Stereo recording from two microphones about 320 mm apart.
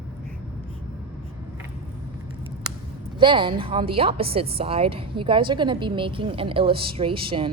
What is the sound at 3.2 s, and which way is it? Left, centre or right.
A woman's voice, centre.